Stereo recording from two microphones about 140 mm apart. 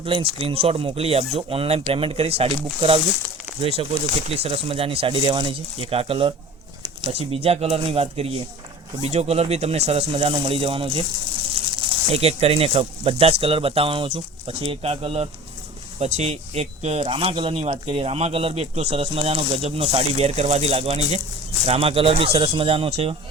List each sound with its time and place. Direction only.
0.0 s speech: 40° right (ahead or behind)
3.6 s speech: 45° right (ahead or behind)